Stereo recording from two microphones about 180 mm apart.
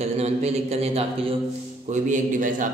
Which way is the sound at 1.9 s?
45° right (ahead or behind).